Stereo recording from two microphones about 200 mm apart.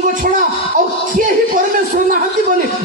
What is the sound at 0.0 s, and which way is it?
Speech, 40° right (ahead or behind).